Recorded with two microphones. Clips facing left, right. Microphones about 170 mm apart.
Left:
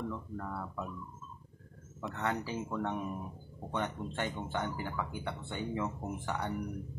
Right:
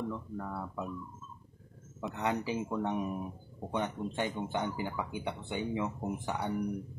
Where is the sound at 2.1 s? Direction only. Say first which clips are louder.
Right 3 dB; 15° right (ahead or behind).